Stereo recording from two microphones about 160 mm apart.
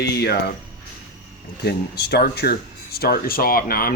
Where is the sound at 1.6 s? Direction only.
85° left.